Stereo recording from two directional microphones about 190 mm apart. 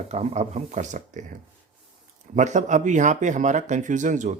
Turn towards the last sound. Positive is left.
turn(degrees=-40)  # may be behind; listen again after turning